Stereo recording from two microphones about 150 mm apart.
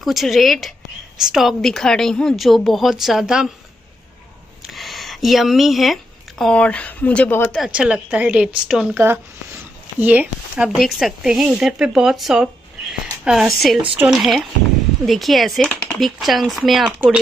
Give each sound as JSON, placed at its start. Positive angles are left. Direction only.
{"t": 0.0, "sound": "a woman's voice", "side_deg": 0}
{"t": 4.6, "sound": "speech", "side_deg": 0}
{"t": 7.5, "sound": "a woman's voice", "side_deg": -5}